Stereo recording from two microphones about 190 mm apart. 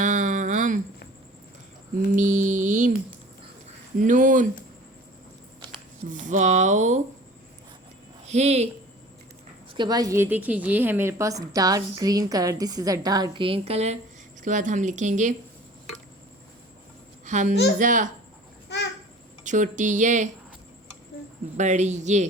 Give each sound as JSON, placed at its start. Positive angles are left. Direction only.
{"t": 0.0, "sound": "a sound", "side_deg": -40}
{"t": 2.1, "sound": "music", "side_deg": -40}
{"t": 3.9, "sound": "speech", "side_deg": -45}
{"t": 6.1, "sound": "speech", "side_deg": -40}
{"t": 8.2, "sound": "speech", "side_deg": -35}
{"t": 9.7, "sound": "a woman's voice", "side_deg": -20}
{"t": 17.2, "sound": "a child's voice", "side_deg": -40}
{"t": 19.5, "sound": "speech", "side_deg": -40}
{"t": 21.6, "sound": "speech", "side_deg": -40}